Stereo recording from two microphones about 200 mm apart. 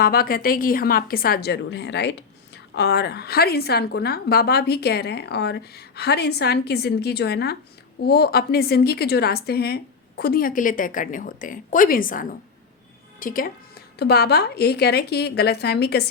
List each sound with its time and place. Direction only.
0.0 s a woman's voice: 50° left (ahead or behind)